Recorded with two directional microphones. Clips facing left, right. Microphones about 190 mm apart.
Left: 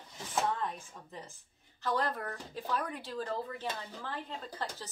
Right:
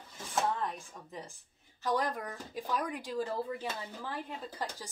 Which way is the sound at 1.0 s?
15° right (ahead or behind).